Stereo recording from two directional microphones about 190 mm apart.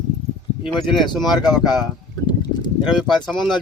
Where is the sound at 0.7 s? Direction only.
Centre (ahead or behind).